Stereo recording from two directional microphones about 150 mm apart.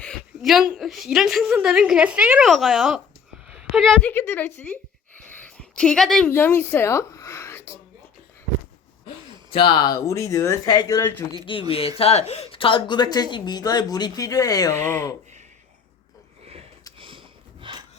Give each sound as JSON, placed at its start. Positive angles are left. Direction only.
{"t": 0.0, "sound": "a woman's voice", "side_deg": 0}
{"t": 5.3, "sound": "a sound", "side_deg": 10}
{"t": 9.0, "sound": "speech", "side_deg": 35}
{"t": 11.5, "sound": "speech", "side_deg": 35}
{"t": 17.7, "sound": "rub", "side_deg": -35}